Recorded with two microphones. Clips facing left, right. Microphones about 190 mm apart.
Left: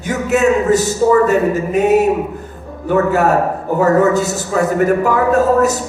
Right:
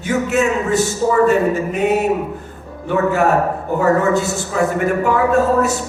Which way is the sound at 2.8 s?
40° left (ahead or behind).